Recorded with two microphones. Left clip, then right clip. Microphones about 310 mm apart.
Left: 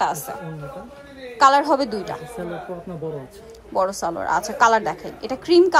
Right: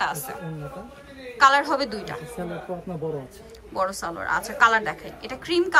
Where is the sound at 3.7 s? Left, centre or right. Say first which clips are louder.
Left 5 dB; centre.